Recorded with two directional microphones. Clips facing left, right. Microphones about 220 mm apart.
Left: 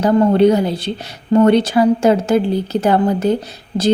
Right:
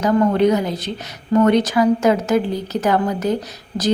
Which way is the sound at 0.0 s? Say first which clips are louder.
Left 4 dB; 30° left (ahead or behind).